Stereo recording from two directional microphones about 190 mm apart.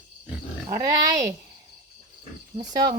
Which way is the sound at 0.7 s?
15° right (ahead or behind).